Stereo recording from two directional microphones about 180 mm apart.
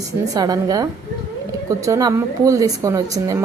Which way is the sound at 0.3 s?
20° right (ahead or behind).